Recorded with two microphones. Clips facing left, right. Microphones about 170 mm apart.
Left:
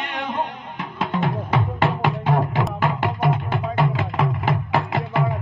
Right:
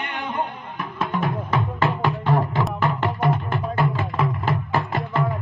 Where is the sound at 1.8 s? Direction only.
20° left (ahead or behind).